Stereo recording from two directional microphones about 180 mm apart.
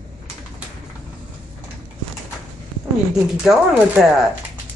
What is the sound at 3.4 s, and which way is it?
Speech, centre (ahead or behind).